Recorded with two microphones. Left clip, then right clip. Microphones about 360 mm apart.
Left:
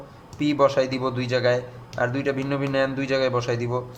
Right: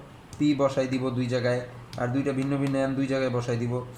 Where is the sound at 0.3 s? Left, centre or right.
Left.